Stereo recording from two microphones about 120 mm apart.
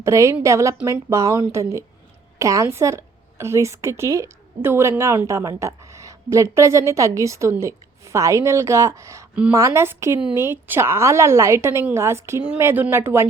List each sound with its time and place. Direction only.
0.0 s a woman's voice: 25° right (ahead or behind)
9.3 s a woman's voice: 10° right (ahead or behind)
9.6 s a woman's voice: 20° right (ahead or behind)